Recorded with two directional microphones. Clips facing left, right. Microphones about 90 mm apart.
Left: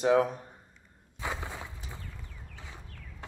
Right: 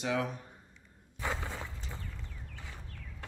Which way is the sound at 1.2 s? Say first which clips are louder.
Even; 15° left (ahead or behind).